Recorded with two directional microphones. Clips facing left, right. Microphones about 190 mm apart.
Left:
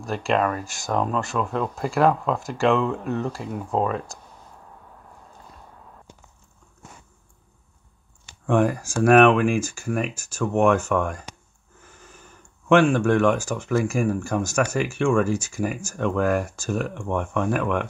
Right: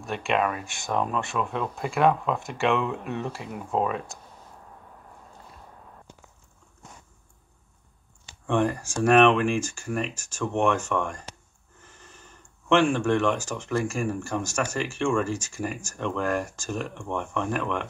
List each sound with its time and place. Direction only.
0.2 s speech: 5° right (ahead or behind)
3.4 s speech: 40° left (ahead or behind)
8.5 s speech: 10° left (ahead or behind)